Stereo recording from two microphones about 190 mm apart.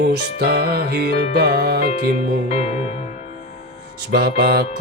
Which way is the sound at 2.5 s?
35° left (ahead or behind).